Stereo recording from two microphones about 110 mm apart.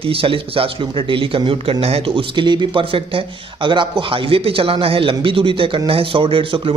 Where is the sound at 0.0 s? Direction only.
55° right (ahead or behind).